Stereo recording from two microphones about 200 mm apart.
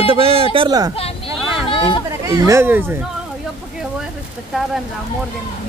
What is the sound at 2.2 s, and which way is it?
Speech, 15° right (ahead or behind).